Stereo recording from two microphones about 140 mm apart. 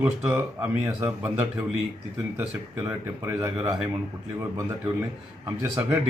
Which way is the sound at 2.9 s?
15° right (ahead or behind).